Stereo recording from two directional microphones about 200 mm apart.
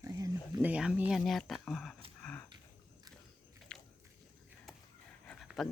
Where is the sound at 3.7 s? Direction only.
5° left (ahead or behind).